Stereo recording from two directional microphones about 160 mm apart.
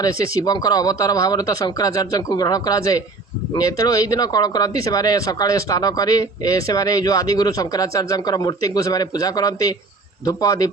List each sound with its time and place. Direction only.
0.0 s speech: 20° left (ahead or behind)